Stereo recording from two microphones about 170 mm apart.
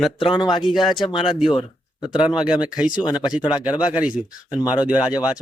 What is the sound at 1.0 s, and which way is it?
Speech, 30° left (ahead or behind).